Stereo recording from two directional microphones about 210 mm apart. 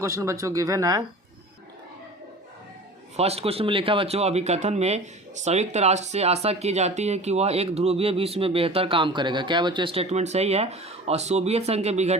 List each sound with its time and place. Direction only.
0.0 s speech: 15° right (ahead or behind)
3.2 s speech: 30° right (ahead or behind)